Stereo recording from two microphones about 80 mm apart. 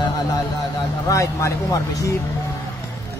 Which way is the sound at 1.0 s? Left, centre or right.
Left.